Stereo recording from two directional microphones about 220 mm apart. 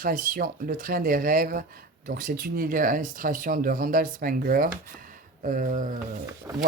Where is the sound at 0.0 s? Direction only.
40° right (ahead or behind).